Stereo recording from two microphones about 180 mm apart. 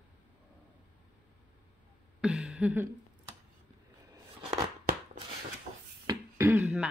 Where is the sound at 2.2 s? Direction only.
5° right (ahead or behind).